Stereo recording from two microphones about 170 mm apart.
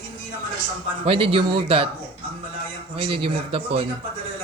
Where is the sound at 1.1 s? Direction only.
30° right (ahead or behind).